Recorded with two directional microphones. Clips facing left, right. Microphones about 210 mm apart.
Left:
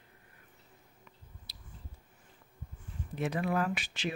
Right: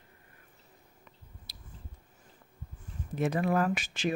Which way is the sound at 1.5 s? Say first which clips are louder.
Right 2 dB; 45° right (ahead or behind).